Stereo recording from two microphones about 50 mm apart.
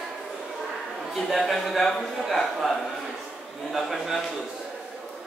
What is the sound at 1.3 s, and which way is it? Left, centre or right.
Speech, centre.